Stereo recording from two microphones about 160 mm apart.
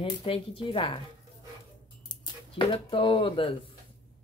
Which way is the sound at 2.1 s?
35° left (ahead or behind).